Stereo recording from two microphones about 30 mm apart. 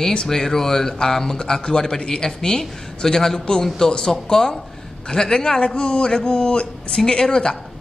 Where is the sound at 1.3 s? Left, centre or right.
Left.